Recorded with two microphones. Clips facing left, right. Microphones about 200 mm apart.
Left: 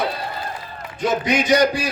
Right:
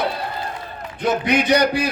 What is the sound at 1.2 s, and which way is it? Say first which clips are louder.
Speech: left 1 dB; 60° right (ahead or behind).